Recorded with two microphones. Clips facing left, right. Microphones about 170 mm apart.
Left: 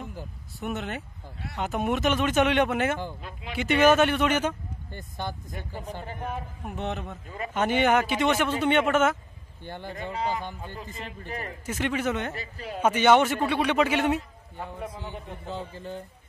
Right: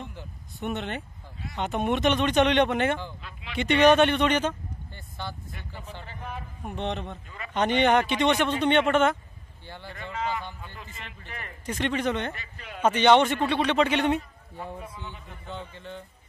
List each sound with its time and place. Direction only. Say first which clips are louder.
0.6 s speech: right 1 dB; centre (ahead or behind)
3.2 s speech: left 4 dB; 45° left (ahead or behind)
3.5 s speech: right 1 dB; 5° left (ahead or behind)
5.2 s speech: left 3 dB; 45° left (ahead or behind)
6.7 s speech: right 1 dB; 5° left (ahead or behind)
7.2 s a man's voice: left 6 dB; 40° left (ahead or behind)
7.5 s speech: right 1 dB; 5° left (ahead or behind)
9.7 s a man's voice: left 5 dB; 45° left (ahead or behind)
11.6 s speech: right 1 dB; 5° left (ahead or behind)
12.4 s a man's voice: left 6 dB; 35° left (ahead or behind)
12.8 s speech: right 1 dB; 10° left (ahead or behind)
14.9 s speech: left 4 dB; 50° left (ahead or behind)
15.4 s a man's voice: left 2 dB; 35° left (ahead or behind)